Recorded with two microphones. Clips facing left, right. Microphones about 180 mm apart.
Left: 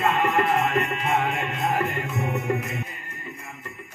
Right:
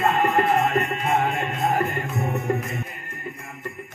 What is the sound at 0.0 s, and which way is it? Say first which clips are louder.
Music: right 2 dB; 40° right (ahead or behind).